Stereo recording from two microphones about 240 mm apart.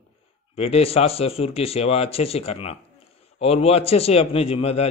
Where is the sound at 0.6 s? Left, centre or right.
Left.